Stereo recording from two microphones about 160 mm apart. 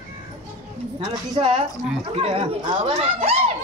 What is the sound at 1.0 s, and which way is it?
Speech, 25° right (ahead or behind).